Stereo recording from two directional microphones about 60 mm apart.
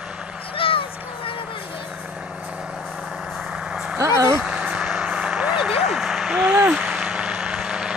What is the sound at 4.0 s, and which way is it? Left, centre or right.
Speech, right.